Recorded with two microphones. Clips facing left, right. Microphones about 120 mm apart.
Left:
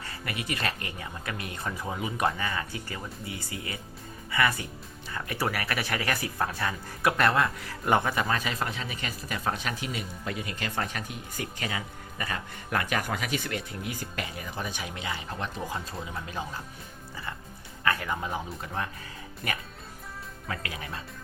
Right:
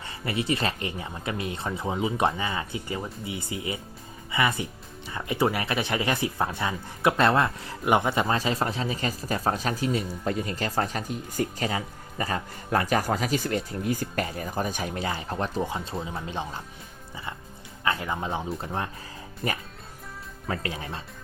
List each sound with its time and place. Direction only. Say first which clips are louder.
0.0 s speech: right 6 dB; 25° right (ahead or behind)
17.8 s speech: right 1 dB; 20° right (ahead or behind)